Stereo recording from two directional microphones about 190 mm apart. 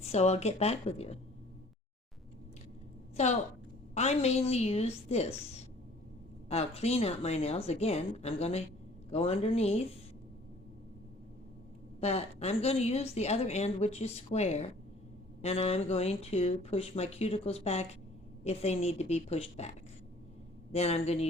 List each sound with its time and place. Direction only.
0.0 s a woman's voice: 35° left (ahead or behind)
3.2 s a woman's voice: 35° left (ahead or behind)
6.5 s a woman's voice: 35° left (ahead or behind)
11.9 s a woman's voice: 35° left (ahead or behind)
20.7 s a woman's voice: 35° left (ahead or behind)